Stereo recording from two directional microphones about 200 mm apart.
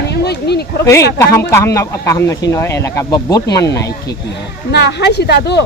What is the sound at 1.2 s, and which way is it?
Speech, 15° left (ahead or behind).